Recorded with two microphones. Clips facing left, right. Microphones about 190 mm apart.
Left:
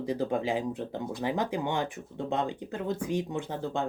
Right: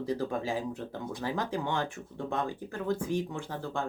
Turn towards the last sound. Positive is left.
turn(degrees=20)  # may be behind; listen again after turning